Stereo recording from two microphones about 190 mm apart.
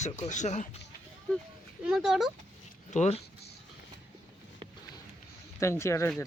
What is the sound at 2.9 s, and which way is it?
Speech, 35° left (ahead or behind).